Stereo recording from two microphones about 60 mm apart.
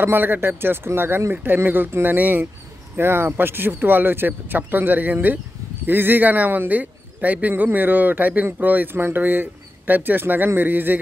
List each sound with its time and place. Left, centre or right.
0.0 s speech: right